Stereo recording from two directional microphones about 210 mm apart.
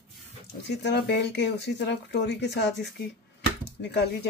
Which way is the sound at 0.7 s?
55° left (ahead or behind).